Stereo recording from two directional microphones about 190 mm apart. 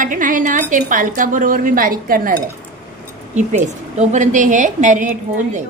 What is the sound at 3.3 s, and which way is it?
A woman's voice, 35° right (ahead or behind).